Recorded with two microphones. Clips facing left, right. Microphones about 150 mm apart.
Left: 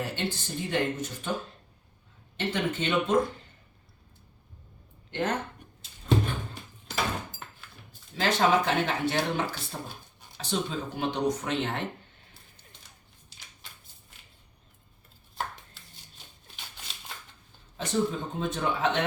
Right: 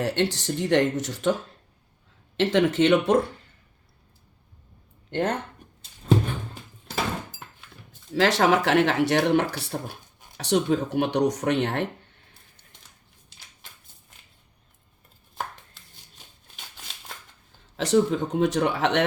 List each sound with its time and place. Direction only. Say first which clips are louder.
0.0 s speech: right 8 dB; 80° right
2.4 s speech: right 10 dB; 90° right
5.1 s speech: right 4 dB; 55° right (ahead or behind)
8.1 s speech: right 4 dB; 85° right; by 11.9 s 65° right (ahead or behind)
17.7 s speech: right 7 dB; 85° right